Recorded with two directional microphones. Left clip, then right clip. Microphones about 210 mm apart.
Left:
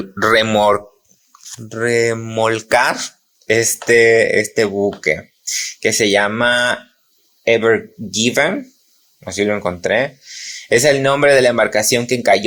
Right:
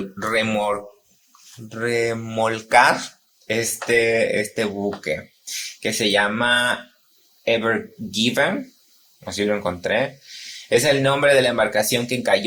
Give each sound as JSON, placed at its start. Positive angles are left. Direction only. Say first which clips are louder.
{"t": 0.2, "sound": "speech", "louder": "left 9 dB", "side_deg": 40}